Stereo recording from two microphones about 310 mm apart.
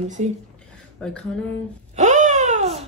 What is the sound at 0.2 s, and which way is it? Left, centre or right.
Speech, right.